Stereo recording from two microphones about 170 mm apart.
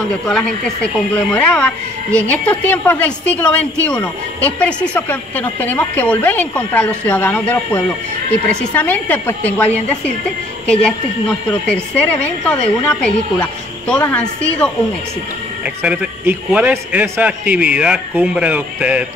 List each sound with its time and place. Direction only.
0.3 s speech: 5° left (ahead or behind)
10.7 s a woman's voice: 5° left (ahead or behind)
15.6 s a man's voice: 10° right (ahead or behind)